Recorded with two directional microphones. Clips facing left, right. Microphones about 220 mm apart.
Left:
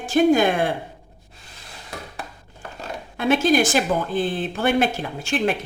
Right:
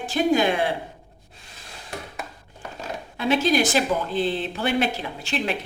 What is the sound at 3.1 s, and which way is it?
Speech, 50° left (ahead or behind).